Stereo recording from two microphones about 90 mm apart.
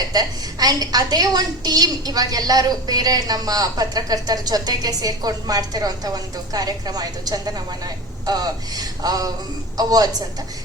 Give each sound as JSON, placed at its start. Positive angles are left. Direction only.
{"t": 0.1, "sound": "a woman's voice", "side_deg": -45}